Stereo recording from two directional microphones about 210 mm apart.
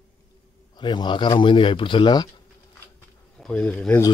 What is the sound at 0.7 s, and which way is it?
A man's voice, 20° left (ahead or behind).